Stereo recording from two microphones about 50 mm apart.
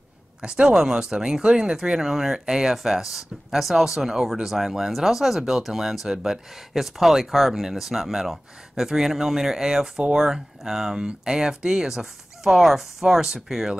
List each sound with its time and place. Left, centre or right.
0.4 s speech: centre